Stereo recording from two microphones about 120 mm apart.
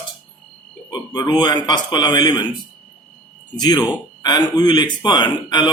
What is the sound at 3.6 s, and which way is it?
A man's voice, 35° left (ahead or behind).